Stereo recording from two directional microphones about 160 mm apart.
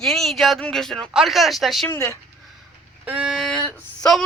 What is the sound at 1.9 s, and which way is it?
Speech, 20° left (ahead or behind).